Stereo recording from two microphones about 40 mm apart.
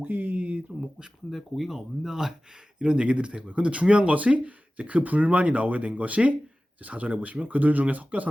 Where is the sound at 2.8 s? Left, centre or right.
Right.